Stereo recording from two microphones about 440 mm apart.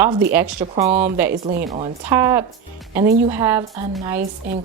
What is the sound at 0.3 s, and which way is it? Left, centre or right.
Speech, centre.